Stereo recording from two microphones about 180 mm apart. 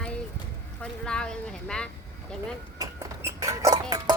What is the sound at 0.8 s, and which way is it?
Speech, 5° left (ahead or behind).